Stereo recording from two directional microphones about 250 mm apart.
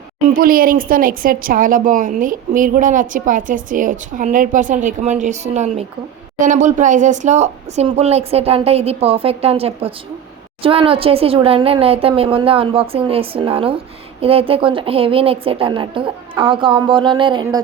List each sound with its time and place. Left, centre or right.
0.3 s a woman's voice: right; by 17.6 s centre